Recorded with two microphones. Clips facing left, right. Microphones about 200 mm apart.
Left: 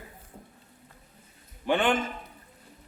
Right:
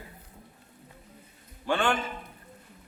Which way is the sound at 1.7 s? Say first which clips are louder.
Left 2 dB; 20° left (ahead or behind).